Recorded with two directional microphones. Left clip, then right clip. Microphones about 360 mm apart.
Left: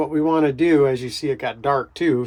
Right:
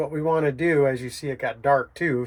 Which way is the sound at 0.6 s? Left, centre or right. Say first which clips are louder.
Left 4 dB; left.